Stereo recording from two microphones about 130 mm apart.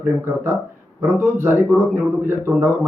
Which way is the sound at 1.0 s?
15° right (ahead or behind).